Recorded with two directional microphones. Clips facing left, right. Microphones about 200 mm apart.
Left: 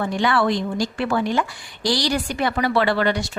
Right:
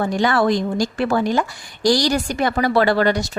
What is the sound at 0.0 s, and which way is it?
A woman's voice, 40° right (ahead or behind).